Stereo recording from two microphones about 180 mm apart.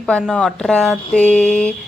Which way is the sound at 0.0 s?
Centre (ahead or behind).